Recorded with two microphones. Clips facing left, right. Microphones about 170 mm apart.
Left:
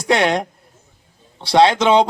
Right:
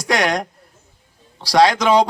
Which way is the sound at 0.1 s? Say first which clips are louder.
Left 2 dB; 25° left (ahead or behind).